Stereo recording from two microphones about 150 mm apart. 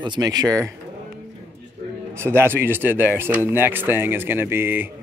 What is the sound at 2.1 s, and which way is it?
Speech, 15° right (ahead or behind).